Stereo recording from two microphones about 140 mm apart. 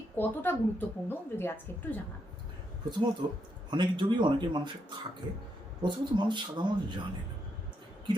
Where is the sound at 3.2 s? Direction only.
30° right (ahead or behind).